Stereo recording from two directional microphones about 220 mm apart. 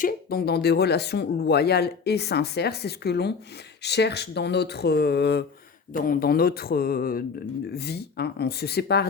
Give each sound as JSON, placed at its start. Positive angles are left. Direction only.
{"t": 0.0, "sound": "speech", "side_deg": 40}
{"t": 5.9, "sound": "speech", "side_deg": 40}